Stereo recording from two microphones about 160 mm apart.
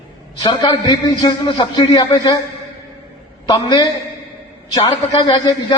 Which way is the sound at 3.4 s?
25° left (ahead or behind).